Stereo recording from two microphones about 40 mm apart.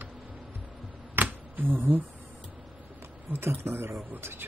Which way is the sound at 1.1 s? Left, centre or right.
Right.